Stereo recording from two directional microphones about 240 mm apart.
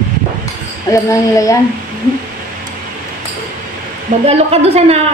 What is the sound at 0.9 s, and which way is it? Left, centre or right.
Speech, centre.